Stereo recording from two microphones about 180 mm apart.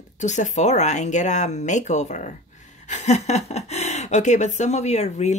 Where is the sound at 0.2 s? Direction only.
40° left (ahead or behind).